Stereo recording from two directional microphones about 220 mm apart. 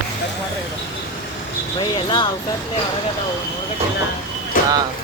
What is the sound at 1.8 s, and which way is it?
Speech, 20° left (ahead or behind).